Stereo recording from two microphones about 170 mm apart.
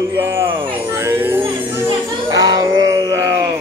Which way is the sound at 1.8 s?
25° right (ahead or behind).